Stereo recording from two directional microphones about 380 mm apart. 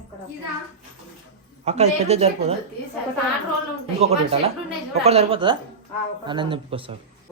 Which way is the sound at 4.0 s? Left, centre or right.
Centre.